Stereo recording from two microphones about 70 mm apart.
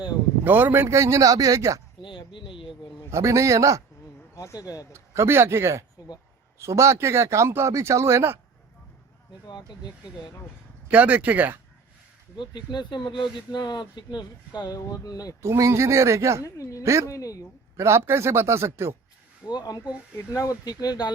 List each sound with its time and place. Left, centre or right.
0.4 s speech: right
3.1 s speech: right
4.4 s speech: left
4.9 s speech: right
9.5 s speech: left
10.8 s speech: right
12.5 s speech: left
15.4 s speech: right
16.6 s speech: left
16.8 s speech: right
17.1 s speech: left
17.7 s speech: right
19.5 s speech: left
20.5 s speech: left